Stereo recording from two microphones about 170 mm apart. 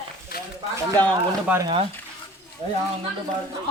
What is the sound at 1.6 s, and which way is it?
Speech, 35° right (ahead or behind).